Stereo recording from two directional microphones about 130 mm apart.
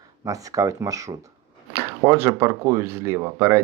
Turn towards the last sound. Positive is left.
turn(degrees=-20)  # may be behind; listen again after turning